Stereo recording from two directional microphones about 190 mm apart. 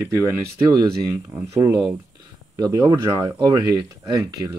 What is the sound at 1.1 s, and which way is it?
Speech, 15° right (ahead or behind).